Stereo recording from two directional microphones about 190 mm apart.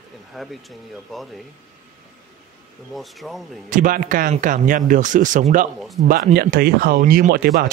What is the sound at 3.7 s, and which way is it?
Speech, 45° right (ahead or behind).